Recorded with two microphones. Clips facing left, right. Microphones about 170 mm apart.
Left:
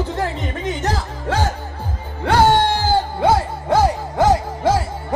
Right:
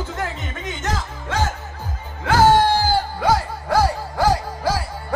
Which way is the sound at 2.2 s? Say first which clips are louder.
Even; 25° left (ahead or behind).